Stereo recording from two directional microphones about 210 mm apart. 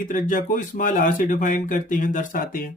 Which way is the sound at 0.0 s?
40° left (ahead or behind).